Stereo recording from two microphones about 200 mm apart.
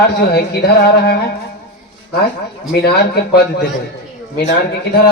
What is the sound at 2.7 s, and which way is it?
Speech, 55° left (ahead or behind).